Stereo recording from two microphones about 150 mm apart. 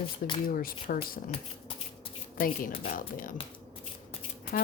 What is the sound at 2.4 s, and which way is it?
Speech, 65° left (ahead or behind).